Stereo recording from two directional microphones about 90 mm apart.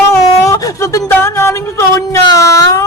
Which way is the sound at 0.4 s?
35° left (ahead or behind).